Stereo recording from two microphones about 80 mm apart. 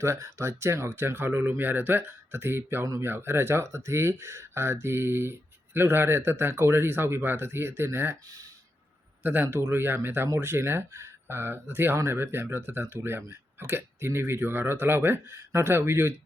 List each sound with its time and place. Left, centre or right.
0.0 s speech: right
9.2 s speech: right